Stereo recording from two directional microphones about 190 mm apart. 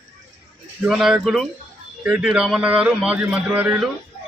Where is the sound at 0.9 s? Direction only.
5° right (ahead or behind).